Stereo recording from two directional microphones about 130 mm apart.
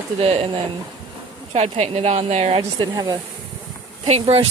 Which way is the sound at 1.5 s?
55° right (ahead or behind).